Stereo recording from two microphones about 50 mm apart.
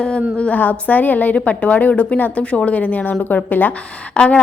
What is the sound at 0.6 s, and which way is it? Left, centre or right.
Speech, left.